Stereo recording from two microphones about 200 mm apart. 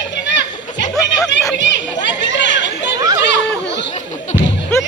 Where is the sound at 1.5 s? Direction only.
60° left (ahead or behind).